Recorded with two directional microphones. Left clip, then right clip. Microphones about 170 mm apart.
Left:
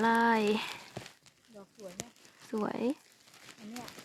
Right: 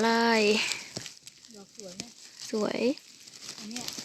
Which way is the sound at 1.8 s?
35° left (ahead or behind).